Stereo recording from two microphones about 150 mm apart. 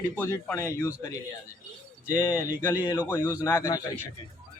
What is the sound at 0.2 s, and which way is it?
Speech, 15° left (ahead or behind).